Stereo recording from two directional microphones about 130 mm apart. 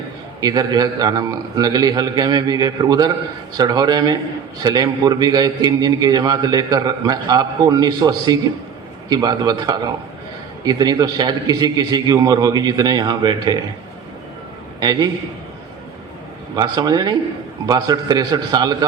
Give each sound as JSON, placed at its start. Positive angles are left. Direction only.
{"t": 0.4, "sound": "a man's voice", "side_deg": -30}
{"t": 14.8, "sound": "a man's voice", "side_deg": -30}
{"t": 16.6, "sound": "a man's voice", "side_deg": -30}